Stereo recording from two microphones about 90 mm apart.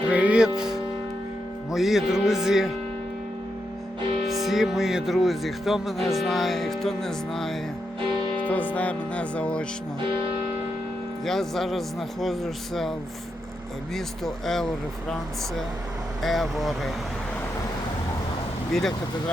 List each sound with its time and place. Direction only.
0.1 s music: 15° right (ahead or behind)
4.3 s music: centre (ahead or behind)
8.4 s music: 15° left (ahead or behind)
11.3 s music: 5° left (ahead or behind)
13.9 s music: 5° left (ahead or behind)
16.2 s music: centre (ahead or behind)
18.7 s music: 5° left (ahead or behind)